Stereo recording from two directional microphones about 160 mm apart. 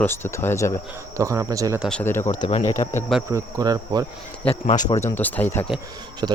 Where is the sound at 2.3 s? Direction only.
50° left (ahead or behind).